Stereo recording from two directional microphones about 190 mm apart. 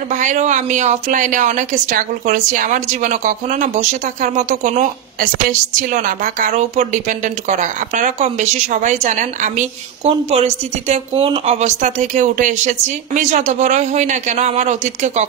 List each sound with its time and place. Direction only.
0.1 s a woman's voice: 40° right (ahead or behind)